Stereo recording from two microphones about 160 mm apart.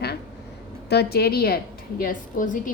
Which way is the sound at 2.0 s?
55° left (ahead or behind).